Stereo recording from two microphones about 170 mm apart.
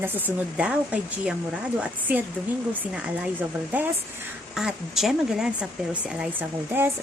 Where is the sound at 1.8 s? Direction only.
10° right (ahead or behind).